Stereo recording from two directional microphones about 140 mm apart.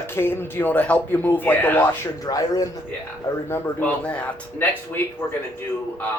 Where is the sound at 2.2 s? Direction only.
25° left (ahead or behind).